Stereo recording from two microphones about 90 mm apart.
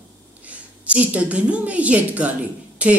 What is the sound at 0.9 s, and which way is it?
A woman's voice, 15° right (ahead or behind).